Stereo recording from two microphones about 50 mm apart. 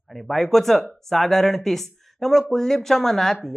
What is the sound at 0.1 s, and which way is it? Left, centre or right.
Speech, centre.